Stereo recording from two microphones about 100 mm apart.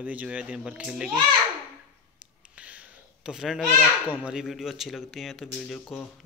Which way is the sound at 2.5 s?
15° right (ahead or behind).